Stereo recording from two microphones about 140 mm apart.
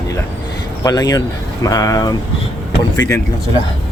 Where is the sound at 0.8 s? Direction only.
25° left (ahead or behind).